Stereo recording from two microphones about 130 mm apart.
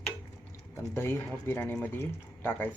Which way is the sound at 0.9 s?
20° left (ahead or behind).